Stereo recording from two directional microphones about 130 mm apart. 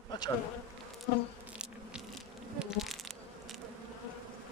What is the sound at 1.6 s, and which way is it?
Biting, 5° right (ahead or behind).